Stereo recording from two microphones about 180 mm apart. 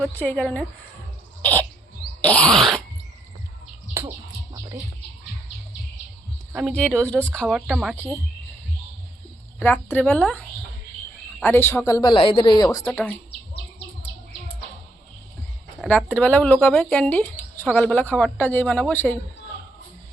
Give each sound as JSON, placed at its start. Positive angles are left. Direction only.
{"t": 0.0, "sound": "speech", "side_deg": 5}
{"t": 1.4, "sound": "a sound", "side_deg": 10}
{"t": 4.5, "sound": "bird", "side_deg": -20}
{"t": 6.5, "sound": "speech", "side_deg": -5}
{"t": 6.7, "sound": "speech", "side_deg": 5}
{"t": 9.6, "sound": "speech", "side_deg": 10}
{"t": 15.8, "sound": "speech", "side_deg": -5}
{"t": 16.2, "sound": "speech", "side_deg": 10}